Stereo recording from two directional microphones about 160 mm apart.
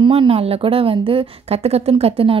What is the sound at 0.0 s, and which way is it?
A woman's voice, 35° right (ahead or behind).